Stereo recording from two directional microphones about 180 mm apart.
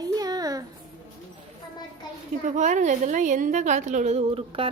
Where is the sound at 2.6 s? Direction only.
45° right (ahead or behind).